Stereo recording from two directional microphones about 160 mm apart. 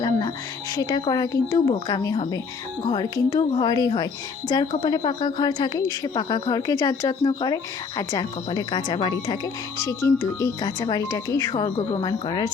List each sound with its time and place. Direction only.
0.0 s music: 25° left (ahead or behind)
0.8 s a woman's voice: 25° left (ahead or behind)
10.0 s a woman's voice: 20° left (ahead or behind)